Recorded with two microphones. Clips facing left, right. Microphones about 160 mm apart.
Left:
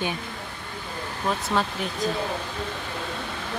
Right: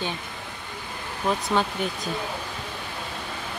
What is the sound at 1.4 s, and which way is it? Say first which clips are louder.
Speech: right 1 dB; centre (ahead or behind).